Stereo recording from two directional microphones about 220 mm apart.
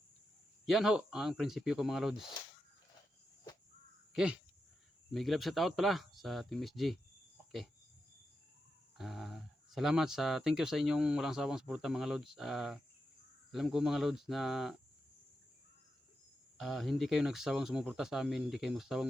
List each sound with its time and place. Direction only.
0.6 s speech: centre (ahead or behind)
4.1 s speech: 5° right (ahead or behind)
9.0 s speech: centre (ahead or behind)
16.6 s speech: centre (ahead or behind)